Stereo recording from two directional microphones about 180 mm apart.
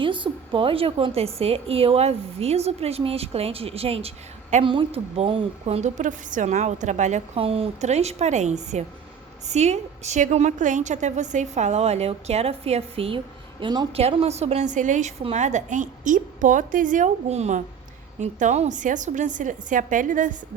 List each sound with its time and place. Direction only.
0.0 s a woman's voice: 30° right (ahead or behind); by 20.3 s 45° right (ahead or behind)